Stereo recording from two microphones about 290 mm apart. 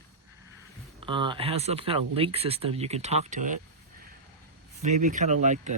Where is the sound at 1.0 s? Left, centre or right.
Centre.